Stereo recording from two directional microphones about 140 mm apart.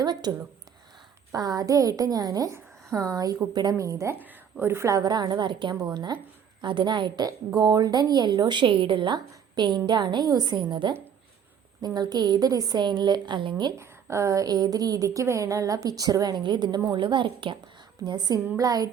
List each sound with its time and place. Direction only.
0.0 s a woman's voice: 30° right (ahead or behind)
13.7 s a woman's voice: 20° right (ahead or behind)